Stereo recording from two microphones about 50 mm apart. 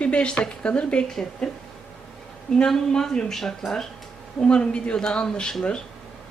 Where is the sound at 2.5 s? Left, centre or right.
Centre.